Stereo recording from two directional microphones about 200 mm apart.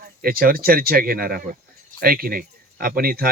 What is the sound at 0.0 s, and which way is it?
Speech, 45° right (ahead or behind).